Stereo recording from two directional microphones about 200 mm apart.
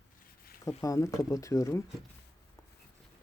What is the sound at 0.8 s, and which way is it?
Speech, 15° left (ahead or behind).